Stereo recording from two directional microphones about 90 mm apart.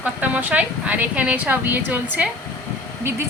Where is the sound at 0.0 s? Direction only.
20° right (ahead or behind).